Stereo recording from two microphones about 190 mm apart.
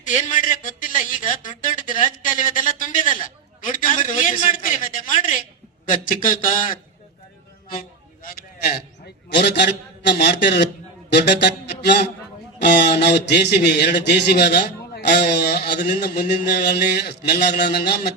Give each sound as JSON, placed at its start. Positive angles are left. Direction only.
{"t": 0.0, "sound": "a man's voice", "side_deg": 40}
{"t": 9.3, "sound": "a man's voice", "side_deg": 65}
{"t": 11.1, "sound": "music", "side_deg": 65}
{"t": 12.5, "sound": "a man's voice", "side_deg": 60}